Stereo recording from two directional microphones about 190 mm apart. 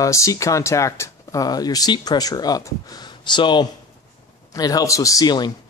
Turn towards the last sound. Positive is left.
turn(degrees=20)  # may be behind; listen again after turning